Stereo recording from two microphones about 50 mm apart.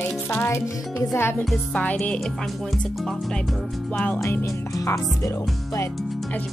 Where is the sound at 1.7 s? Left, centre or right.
Left.